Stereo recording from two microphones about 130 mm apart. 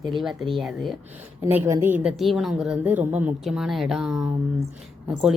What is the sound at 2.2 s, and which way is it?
Speech, centre (ahead or behind).